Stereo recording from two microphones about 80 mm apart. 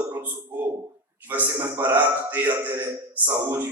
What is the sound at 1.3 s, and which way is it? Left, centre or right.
A man's voice, right.